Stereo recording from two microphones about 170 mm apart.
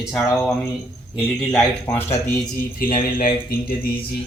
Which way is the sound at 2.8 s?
55° left (ahead or behind).